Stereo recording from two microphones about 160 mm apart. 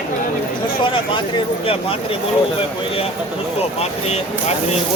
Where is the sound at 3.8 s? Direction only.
40° left (ahead or behind).